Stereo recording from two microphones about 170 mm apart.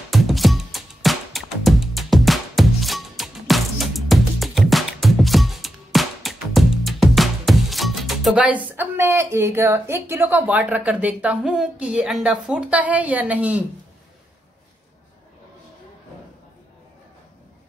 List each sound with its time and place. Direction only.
0.1 s music: centre (ahead or behind)
12.4 s a woman's voice: 5° right (ahead or behind)